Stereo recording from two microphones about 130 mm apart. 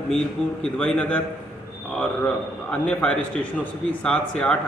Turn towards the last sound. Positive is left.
turn(degrees=10)  # may be behind; listen again after turning